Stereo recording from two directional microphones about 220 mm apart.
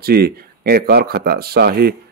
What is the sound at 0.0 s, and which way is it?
Speech, 45° right (ahead or behind).